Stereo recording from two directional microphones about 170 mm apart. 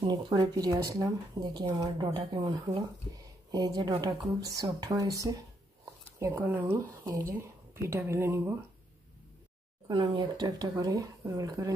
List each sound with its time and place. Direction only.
0.0 s speech: 25° right (ahead or behind)
9.8 s speech: 25° right (ahead or behind)